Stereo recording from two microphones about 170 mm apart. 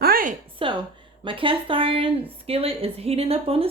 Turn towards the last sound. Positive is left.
turn(degrees=-35)  # may be behind; listen again after turning